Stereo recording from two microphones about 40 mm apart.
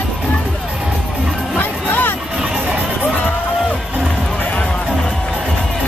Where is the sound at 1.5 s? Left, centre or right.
Left.